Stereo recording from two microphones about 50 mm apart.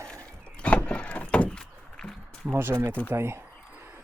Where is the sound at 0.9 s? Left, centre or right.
Left.